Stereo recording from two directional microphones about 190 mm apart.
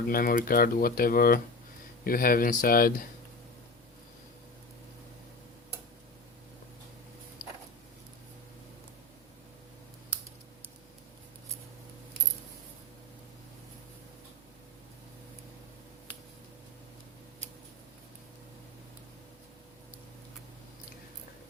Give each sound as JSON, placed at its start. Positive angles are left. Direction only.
{"t": 0.1, "sound": "speech", "side_deg": 50}